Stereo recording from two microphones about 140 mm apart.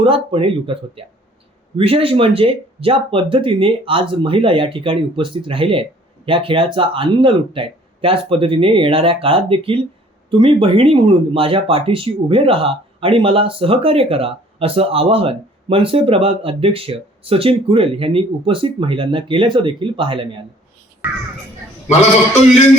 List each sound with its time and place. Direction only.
0.0 s speech: 40° right (ahead or behind)
21.0 s speech: 10° right (ahead or behind)